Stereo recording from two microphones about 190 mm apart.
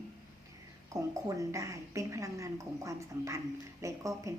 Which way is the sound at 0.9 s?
20° right (ahead or behind).